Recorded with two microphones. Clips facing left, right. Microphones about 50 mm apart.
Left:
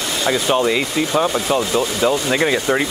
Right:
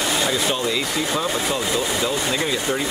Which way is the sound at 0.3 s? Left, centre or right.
Left.